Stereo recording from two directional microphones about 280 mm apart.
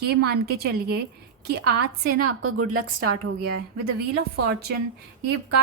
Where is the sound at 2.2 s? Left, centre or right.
Right.